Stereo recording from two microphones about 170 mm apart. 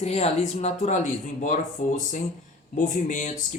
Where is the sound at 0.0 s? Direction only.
40° left (ahead or behind).